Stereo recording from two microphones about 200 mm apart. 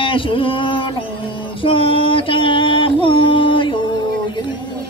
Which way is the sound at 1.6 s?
25° left (ahead or behind).